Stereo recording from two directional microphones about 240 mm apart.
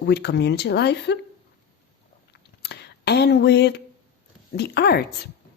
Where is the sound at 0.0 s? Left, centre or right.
Left.